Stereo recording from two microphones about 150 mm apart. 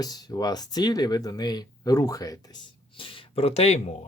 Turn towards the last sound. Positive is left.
turn(degrees=45)  # may be behind; listen again after turning